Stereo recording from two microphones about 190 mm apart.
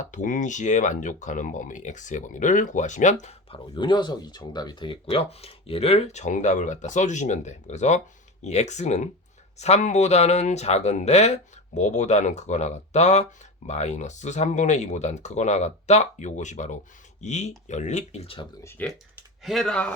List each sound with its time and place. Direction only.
0.0 s speech: 40° left (ahead or behind)
18.6 s speech: 10° left (ahead or behind)